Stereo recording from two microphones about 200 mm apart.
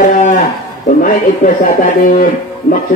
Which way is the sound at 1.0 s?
45° left (ahead or behind).